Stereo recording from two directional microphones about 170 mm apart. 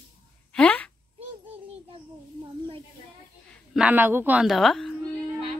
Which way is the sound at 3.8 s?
10° right (ahead or behind).